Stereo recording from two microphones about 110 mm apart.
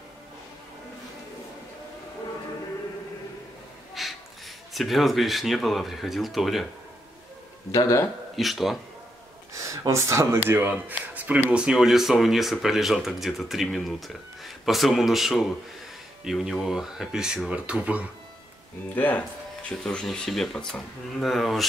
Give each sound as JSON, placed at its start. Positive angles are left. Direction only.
{"t": 4.0, "sound": "snort", "side_deg": 0}
{"t": 4.7, "sound": "speech", "side_deg": 0}
{"t": 8.4, "sound": "speech", "side_deg": 0}
{"t": 9.5, "sound": "speech", "side_deg": -30}
{"t": 18.9, "sound": "speech", "side_deg": 15}
{"t": 19.8, "sound": "speech", "side_deg": 5}